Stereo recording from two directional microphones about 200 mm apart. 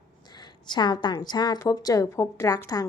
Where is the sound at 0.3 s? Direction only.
20° left (ahead or behind).